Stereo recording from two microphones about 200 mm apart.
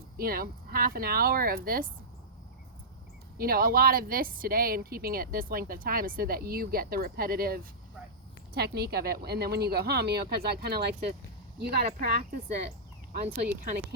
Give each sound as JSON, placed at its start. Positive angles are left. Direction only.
{"t": 0.2, "sound": "a woman's voice", "side_deg": -45}
{"t": 3.3, "sound": "a woman's voice", "side_deg": -45}